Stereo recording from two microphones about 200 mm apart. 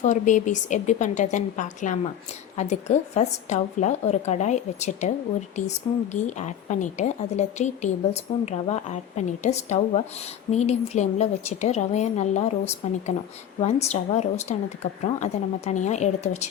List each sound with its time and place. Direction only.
0.0 s a woman's voice: 35° left (ahead or behind)
6.1 s a woman's voice: 35° left (ahead or behind)